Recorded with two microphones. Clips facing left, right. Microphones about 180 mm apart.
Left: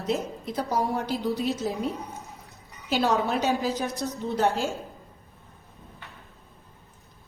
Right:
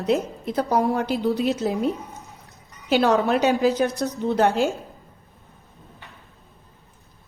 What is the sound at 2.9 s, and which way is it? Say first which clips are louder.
A woman's voice: right 5 dB; 60° right (ahead or behind).